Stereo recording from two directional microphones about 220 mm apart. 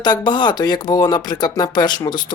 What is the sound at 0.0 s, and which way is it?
Speech, 20° left (ahead or behind).